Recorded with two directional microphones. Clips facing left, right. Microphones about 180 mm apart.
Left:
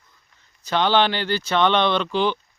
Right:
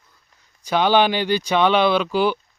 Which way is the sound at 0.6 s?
10° right (ahead or behind).